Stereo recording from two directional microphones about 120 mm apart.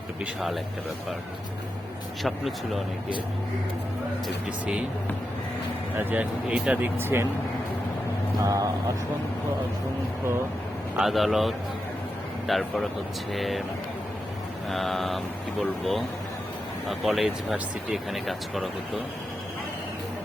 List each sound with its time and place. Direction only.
0.3 s speech: centre (ahead or behind)
2.2 s speech: centre (ahead or behind)
4.4 s speech: 10° right (ahead or behind)
6.0 s speech: 15° right (ahead or behind)
8.4 s speech: 30° right (ahead or behind)
10.9 s speech: centre (ahead or behind)
14.7 s speech: centre (ahead or behind)